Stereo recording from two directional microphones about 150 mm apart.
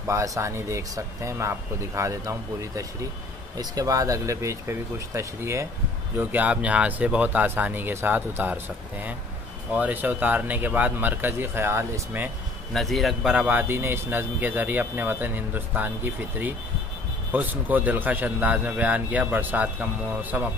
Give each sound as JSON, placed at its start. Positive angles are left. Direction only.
{"t": 0.0, "sound": "a man's voice", "side_deg": -20}
{"t": 12.7, "sound": "a man's voice", "side_deg": 0}